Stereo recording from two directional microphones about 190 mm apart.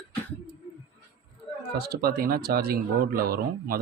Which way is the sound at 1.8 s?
55° right (ahead or behind).